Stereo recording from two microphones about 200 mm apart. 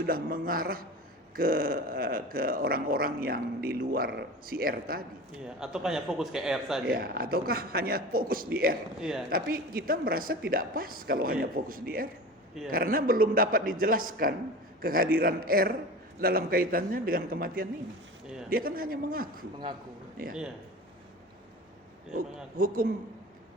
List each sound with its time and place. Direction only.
0.0 s speech: 45° right (ahead or behind)
5.5 s a man's voice: 5° right (ahead or behind)
6.8 s speech: 50° right (ahead or behind)
9.0 s a man's voice: 5° right (ahead or behind)
9.3 s speech: 45° right (ahead or behind)
22.5 s speech: 45° right (ahead or behind)